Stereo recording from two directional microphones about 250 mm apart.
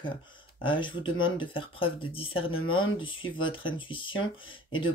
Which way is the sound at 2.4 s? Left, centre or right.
Left.